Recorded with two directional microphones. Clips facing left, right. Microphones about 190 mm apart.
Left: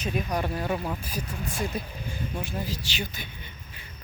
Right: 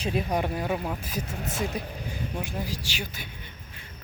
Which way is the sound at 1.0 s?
20° right (ahead or behind).